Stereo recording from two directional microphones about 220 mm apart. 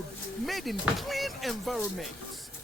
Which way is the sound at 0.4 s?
Centre (ahead or behind).